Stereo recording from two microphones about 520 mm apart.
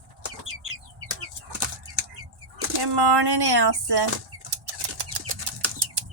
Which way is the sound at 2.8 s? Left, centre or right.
Right.